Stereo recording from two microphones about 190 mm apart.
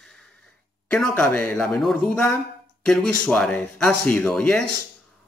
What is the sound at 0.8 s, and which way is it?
Speech, 5° left (ahead or behind).